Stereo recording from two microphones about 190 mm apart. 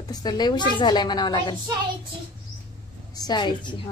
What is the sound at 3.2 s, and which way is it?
Speech, 25° left (ahead or behind).